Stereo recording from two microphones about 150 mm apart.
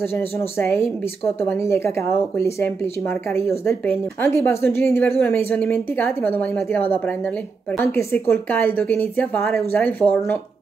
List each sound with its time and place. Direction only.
0.0 s speech: 15° left (ahead or behind)